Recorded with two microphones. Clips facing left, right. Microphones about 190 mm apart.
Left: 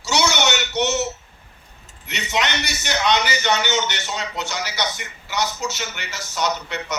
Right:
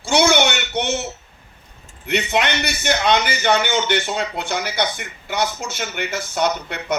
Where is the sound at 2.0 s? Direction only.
55° right (ahead or behind).